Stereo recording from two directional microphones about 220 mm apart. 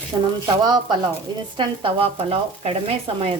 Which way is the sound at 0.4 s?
20° right (ahead or behind).